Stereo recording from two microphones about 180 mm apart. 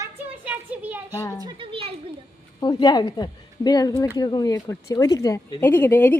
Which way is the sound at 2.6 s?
20° left (ahead or behind).